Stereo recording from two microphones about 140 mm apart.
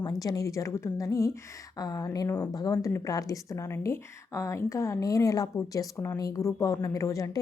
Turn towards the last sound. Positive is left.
turn(degrees=25)  # may be behind; listen again after turning